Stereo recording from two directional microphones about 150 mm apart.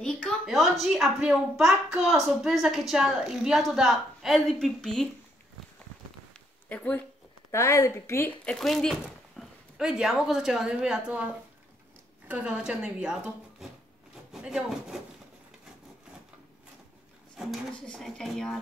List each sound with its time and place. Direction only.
0.5 s a woman's voice: centre (ahead or behind)
6.7 s speech: 10° left (ahead or behind)
7.5 s speech: 20° left (ahead or behind)
8.5 s a woman's voice: centre (ahead or behind)
17.4 s a woman's voice: centre (ahead or behind)